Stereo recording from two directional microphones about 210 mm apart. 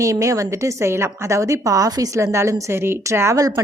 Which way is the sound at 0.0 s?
15° right (ahead or behind).